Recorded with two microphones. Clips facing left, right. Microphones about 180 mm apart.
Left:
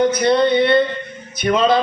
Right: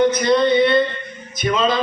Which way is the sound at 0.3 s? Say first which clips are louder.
Left 2 dB; 60° left (ahead or behind).